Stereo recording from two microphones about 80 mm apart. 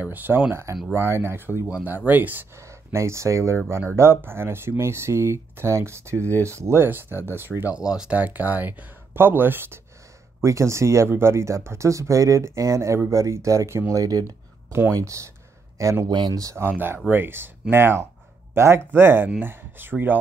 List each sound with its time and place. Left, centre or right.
0.0 s speech: right
2.5 s speech: right
7.7 s speech: centre; by 9.8 s right
10.4 s speech: right
14.7 s speech: right
16.1 s speech: right
16.3 s speech: right
16.6 s speech: right